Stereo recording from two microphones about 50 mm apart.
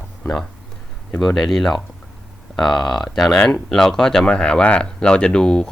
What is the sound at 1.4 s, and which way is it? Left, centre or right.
Speech, centre.